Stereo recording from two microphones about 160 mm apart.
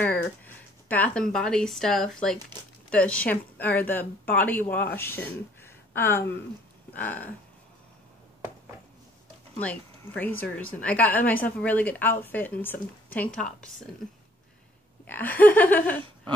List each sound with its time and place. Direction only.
0.8 s a woman's voice: 10° left (ahead or behind)
6.9 s a sound: 10° left (ahead or behind)
9.6 s a woman's voice: 10° left (ahead or behind)
15.0 s a woman's voice: 10° left (ahead or behind)